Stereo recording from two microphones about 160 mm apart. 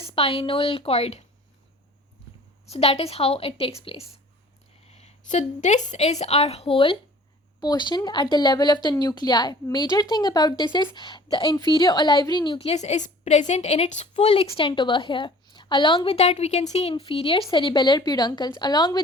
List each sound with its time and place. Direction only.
0.1 s a woman's voice: 35° left (ahead or behind)
2.6 s a woman's voice: 40° left (ahead or behind)